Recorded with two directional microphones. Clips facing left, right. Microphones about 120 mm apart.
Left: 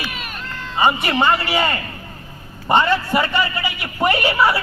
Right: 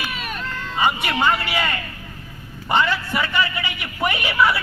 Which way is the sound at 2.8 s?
30° left (ahead or behind).